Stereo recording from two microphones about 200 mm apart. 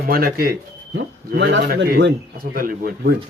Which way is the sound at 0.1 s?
50° right (ahead or behind).